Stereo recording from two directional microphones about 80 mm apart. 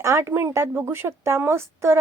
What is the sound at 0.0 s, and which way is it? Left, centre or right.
Speech, right.